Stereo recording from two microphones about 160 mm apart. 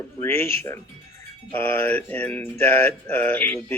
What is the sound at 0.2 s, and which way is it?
Mantra, 15° left (ahead or behind).